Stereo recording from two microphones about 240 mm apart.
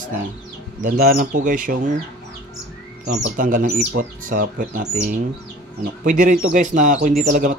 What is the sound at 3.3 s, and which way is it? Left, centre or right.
Speech, right.